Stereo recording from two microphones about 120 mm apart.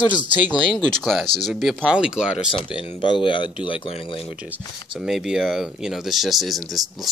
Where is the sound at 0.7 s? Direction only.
5° left (ahead or behind).